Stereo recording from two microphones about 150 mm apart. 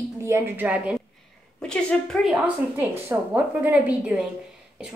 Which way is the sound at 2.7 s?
15° right (ahead or behind).